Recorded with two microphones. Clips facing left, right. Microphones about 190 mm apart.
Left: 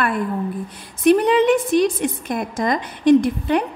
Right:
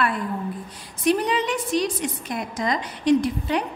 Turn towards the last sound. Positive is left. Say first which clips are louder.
# left 5 dB
turn(degrees=55)  # may be behind; listen again after turning